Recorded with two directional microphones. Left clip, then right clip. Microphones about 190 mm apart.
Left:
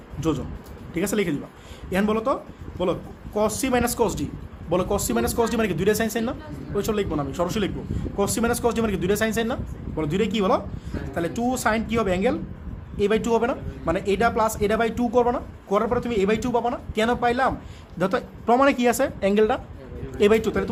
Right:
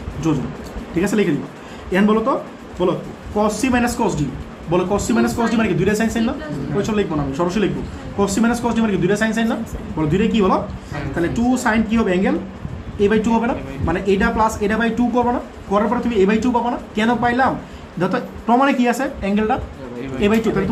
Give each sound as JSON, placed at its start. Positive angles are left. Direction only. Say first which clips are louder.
{"t": 0.9, "sound": "speech", "louder": "right 6 dB", "side_deg": 65}